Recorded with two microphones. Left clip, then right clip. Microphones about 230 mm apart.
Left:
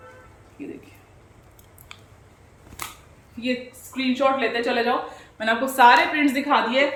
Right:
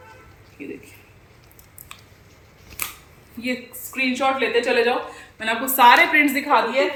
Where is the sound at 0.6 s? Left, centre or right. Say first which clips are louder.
Right 2 dB; centre.